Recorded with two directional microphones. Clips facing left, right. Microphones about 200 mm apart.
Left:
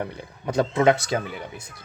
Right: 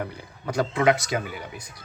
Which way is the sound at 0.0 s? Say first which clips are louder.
Left 2 dB; 25° left (ahead or behind).